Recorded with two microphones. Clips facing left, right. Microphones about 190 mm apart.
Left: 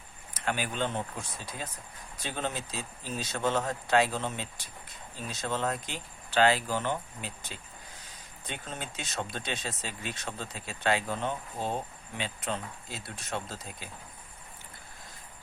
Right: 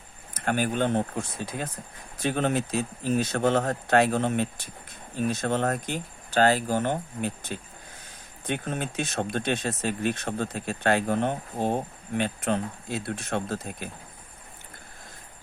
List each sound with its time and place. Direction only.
0.3 s speech: 50° right (ahead or behind)